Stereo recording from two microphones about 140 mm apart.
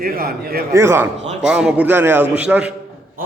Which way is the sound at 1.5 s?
5° right (ahead or behind).